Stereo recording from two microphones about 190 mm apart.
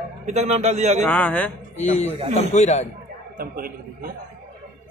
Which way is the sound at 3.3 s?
50° right (ahead or behind).